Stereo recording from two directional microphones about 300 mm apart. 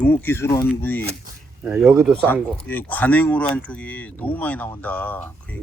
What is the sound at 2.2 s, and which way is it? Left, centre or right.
Speech, centre.